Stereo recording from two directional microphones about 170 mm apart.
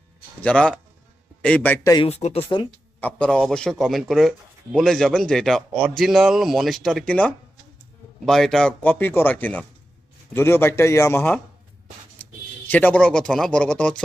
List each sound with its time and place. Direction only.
0.4 s speech: 5° left (ahead or behind)
2.0 s speech: 40° left (ahead or behind)
3.0 s a man's voice: 10° left (ahead or behind)
12.2 s a sound: 10° left (ahead or behind)
12.6 s a man's voice: 10° left (ahead or behind)